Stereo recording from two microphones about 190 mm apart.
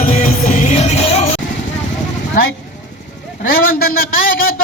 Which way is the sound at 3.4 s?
50° left (ahead or behind).